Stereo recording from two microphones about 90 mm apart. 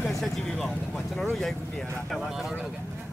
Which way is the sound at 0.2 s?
10° left (ahead or behind).